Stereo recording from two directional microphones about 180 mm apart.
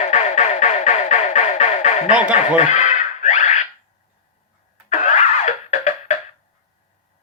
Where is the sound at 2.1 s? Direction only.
5° right (ahead or behind).